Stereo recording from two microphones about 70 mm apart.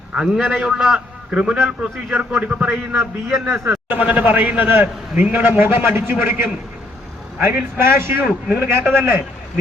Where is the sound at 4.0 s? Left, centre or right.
Right.